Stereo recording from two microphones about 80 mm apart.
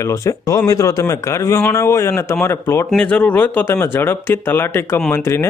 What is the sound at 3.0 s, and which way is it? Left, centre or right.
A man's voice, centre.